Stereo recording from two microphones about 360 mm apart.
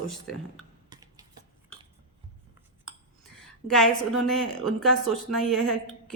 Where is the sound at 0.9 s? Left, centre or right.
Centre.